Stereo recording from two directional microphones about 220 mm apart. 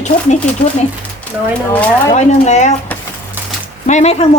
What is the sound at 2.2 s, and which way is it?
Speech, 30° left (ahead or behind).